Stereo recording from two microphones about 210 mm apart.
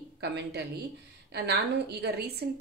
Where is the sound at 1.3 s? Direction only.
50° right (ahead or behind).